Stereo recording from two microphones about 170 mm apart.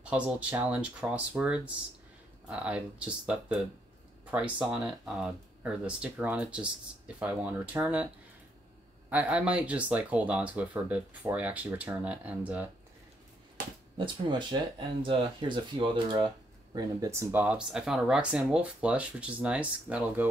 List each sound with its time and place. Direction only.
0.0 s speech: 5° right (ahead or behind)
9.1 s speech: 5° right (ahead or behind)
13.9 s speech: 30° right (ahead or behind); by 20.2 s 10° right (ahead or behind)